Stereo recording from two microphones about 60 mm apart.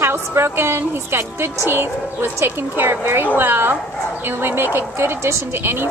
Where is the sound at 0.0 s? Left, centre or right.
Right.